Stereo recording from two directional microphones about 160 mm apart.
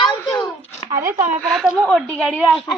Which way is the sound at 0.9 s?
20° right (ahead or behind).